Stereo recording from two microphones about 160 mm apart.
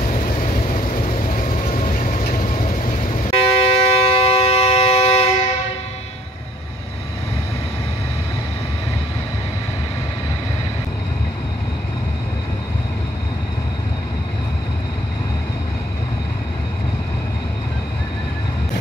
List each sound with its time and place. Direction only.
0.0 s vehicle: 55° left (ahead or behind)
0.8 s train: 55° left (ahead or behind)
3.3 s a sound: 35° left (ahead or behind)